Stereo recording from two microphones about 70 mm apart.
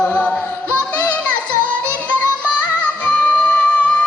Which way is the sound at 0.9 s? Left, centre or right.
Left.